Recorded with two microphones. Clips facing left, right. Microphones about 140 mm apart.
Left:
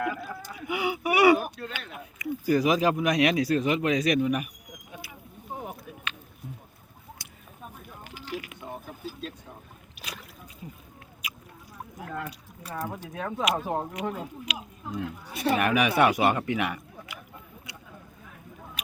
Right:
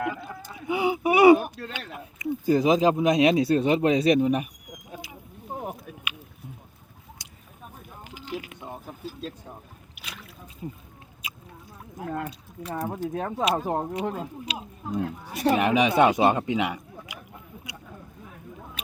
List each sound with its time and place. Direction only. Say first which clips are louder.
0.0 s a sound: even; 20° right (ahead or behind)
1.7 s speech: right 2 dB; 20° right (ahead or behind)
7.2 s a sound: left 1 dB; 15° right (ahead or behind)
10.6 s speech: right 7 dB; 30° right (ahead or behind)
11.2 s rodents: even; 25° right (ahead or behind)
12.7 s speech: right 5 dB; 45° right (ahead or behind)
15.5 s speech: right 2 dB; 20° right (ahead or behind)